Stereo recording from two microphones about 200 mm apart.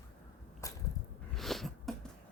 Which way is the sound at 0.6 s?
15° left (ahead or behind).